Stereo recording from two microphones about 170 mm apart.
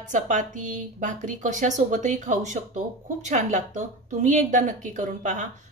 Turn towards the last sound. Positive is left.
turn(degrees=-45)  # may be behind; listen again after turning